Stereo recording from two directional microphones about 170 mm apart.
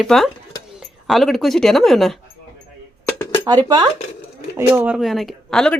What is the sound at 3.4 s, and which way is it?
Speech, 25° right (ahead or behind).